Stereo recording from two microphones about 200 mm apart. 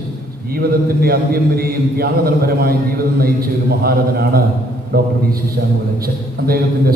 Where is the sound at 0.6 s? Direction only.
50° right (ahead or behind).